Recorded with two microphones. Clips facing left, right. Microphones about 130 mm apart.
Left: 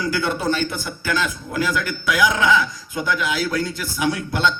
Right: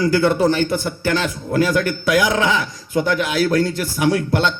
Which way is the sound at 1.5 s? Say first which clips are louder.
Right 5 dB; 50° right (ahead or behind).